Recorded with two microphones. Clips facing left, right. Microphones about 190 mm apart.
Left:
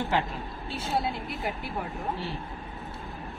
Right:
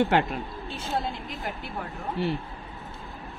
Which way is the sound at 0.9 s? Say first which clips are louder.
Left 1 dB; 10° left (ahead or behind).